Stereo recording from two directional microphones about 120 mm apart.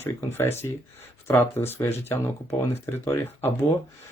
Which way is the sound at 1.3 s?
20° left (ahead or behind).